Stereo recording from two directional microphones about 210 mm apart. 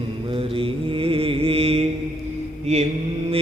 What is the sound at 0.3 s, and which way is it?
Mantra, 25° right (ahead or behind).